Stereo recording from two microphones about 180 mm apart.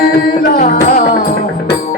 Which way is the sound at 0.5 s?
50° left (ahead or behind).